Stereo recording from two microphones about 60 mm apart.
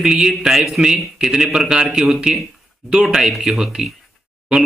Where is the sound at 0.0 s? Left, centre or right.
Centre.